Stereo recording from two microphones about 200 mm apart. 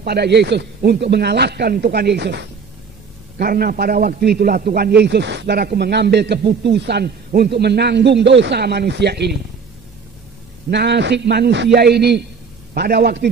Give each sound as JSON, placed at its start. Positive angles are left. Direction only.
{"t": 0.0, "sound": "a man's voice", "side_deg": -55}
{"t": 10.7, "sound": "a man's voice", "side_deg": -55}